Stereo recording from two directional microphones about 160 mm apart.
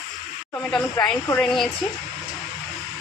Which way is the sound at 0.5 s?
5° left (ahead or behind).